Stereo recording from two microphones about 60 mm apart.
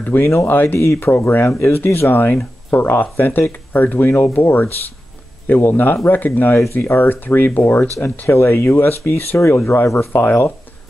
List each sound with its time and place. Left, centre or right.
0.0 s speech: left